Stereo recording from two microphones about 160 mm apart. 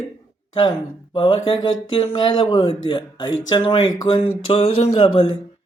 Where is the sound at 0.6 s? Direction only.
30° left (ahead or behind).